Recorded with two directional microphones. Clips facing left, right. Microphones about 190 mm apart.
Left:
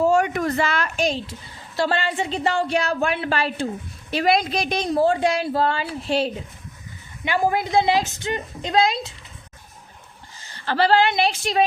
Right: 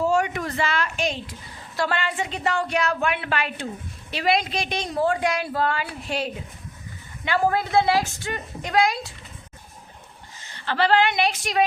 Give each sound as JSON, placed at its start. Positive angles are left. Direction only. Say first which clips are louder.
{"t": 0.0, "sound": "a woman's voice", "louder": "left 4 dB", "side_deg": 50}
{"t": 4.1, "sound": "a woman's voice", "louder": "left 3 dB", "side_deg": 45}
{"t": 7.3, "sound": "a woman's voice", "louder": "left 1 dB", "side_deg": 15}
{"t": 10.4, "sound": "a woman's voice", "louder": "left 3 dB", "side_deg": 35}